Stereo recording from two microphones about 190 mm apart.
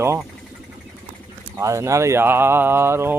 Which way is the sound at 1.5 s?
15° right (ahead or behind).